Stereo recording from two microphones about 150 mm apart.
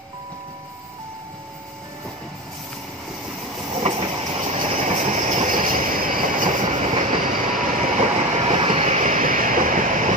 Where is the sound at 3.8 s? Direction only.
40° right (ahead or behind).